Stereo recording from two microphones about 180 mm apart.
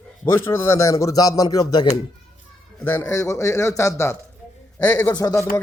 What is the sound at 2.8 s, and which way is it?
A man's voice, 10° left (ahead or behind).